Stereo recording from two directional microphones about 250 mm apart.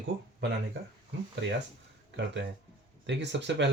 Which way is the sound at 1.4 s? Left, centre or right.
Right.